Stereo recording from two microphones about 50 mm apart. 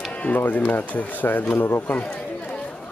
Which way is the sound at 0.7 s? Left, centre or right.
Left.